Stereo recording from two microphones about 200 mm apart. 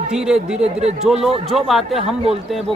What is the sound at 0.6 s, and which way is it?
Speech, 30° right (ahead or behind).